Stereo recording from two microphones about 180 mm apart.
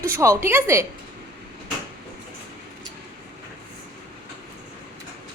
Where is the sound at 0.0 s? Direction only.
15° right (ahead or behind).